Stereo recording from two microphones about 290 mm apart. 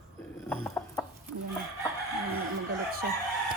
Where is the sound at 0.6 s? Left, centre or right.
Centre.